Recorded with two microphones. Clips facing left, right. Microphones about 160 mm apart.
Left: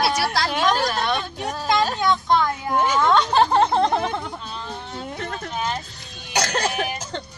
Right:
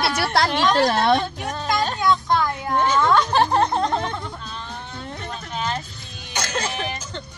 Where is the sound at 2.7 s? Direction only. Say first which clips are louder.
Even; 10° left (ahead or behind).